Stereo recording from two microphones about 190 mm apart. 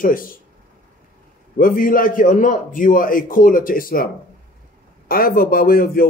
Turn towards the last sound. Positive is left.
turn(degrees=50)  # may be behind; listen again after turning